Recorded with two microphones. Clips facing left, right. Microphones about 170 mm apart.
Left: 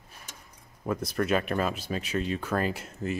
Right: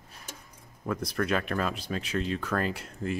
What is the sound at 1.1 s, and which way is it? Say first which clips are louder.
Speech: left 2 dB; 10° left (ahead or behind).